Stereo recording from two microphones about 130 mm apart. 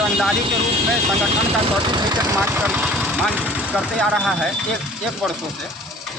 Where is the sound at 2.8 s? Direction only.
5° right (ahead or behind).